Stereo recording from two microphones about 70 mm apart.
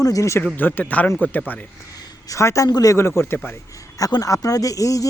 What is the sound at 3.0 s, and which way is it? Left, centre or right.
Speech, left.